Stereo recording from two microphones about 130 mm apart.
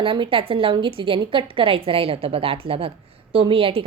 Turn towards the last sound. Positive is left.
turn(degrees=-45)  # may be behind; listen again after turning